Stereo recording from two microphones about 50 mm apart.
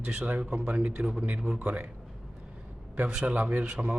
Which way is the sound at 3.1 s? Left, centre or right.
Right.